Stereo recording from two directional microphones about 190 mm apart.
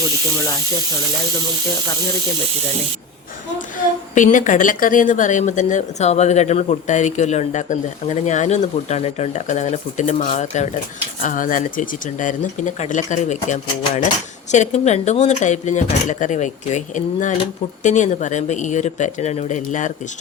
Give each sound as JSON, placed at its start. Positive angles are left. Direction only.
{"t": 4.1, "sound": "speech", "side_deg": 40}